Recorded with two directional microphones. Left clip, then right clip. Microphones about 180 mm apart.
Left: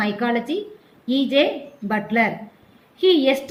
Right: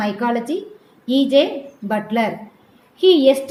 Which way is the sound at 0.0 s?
5° left (ahead or behind).